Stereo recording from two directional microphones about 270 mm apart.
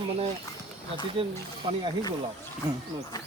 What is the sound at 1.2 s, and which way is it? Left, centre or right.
Speech, centre.